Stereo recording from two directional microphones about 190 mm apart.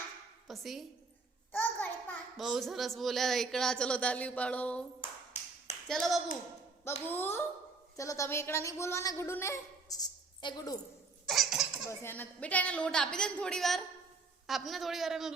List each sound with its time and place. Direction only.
0.4 s a woman's voice: centre (ahead or behind)
1.5 s a sound: 10° left (ahead or behind)
2.4 s speech: centre (ahead or behind)
5.9 s speech: centre (ahead or behind)
7.1 s a woman's voice: 10° left (ahead or behind)
11.3 s laughter: centre (ahead or behind)
11.9 s speech: 10° left (ahead or behind)